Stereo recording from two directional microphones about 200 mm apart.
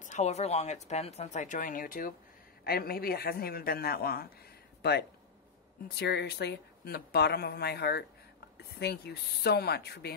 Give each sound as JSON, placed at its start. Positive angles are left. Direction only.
{"t": 0.0, "sound": "speech", "side_deg": 35}
{"t": 5.9, "sound": "speech", "side_deg": 55}